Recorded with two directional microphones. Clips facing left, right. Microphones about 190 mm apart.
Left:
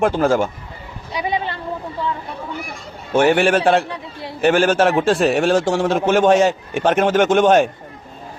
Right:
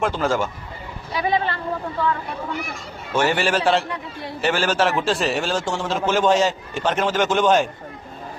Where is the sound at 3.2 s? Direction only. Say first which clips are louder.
Left 6 dB; 55° left (ahead or behind).